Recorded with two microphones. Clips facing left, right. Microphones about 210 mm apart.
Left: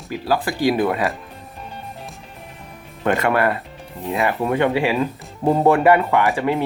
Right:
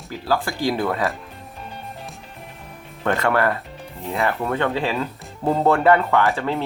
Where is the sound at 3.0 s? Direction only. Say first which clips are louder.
Left 2 dB; 15° left (ahead or behind).